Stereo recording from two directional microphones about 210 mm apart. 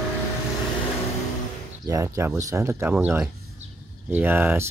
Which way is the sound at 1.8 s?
15° right (ahead or behind).